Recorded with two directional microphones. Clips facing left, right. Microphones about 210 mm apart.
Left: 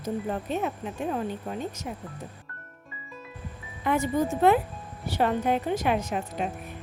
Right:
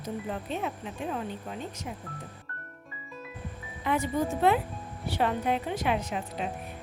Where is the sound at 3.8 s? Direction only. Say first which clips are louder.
Left 3 dB; 45° left (ahead or behind).